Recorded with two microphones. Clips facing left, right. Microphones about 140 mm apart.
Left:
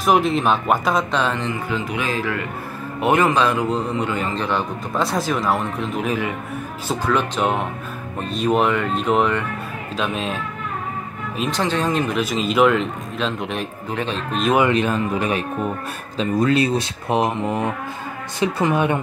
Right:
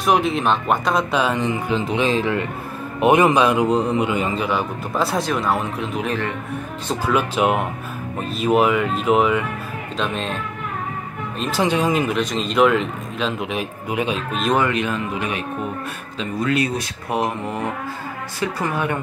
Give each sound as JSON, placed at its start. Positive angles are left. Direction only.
{"t": 0.0, "sound": "speech", "side_deg": 0}
{"t": 1.1, "sound": "a man's voice", "side_deg": -10}
{"t": 7.1, "sound": "a man's voice", "side_deg": -5}
{"t": 11.6, "sound": "a man's voice", "side_deg": -10}
{"t": 12.2, "sound": "a man's voice", "side_deg": 5}
{"t": 14.7, "sound": "a man's voice", "side_deg": 35}